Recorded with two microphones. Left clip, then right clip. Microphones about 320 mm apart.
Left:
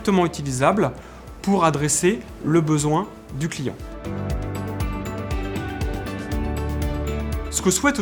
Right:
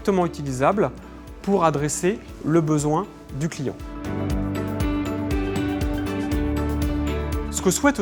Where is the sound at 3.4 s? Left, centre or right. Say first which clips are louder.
Even; left.